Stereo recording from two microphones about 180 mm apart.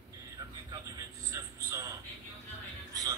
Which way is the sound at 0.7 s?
20° right (ahead or behind).